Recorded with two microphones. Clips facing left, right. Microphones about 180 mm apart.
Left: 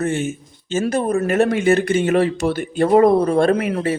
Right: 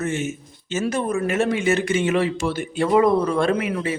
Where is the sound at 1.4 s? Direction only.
55° left (ahead or behind).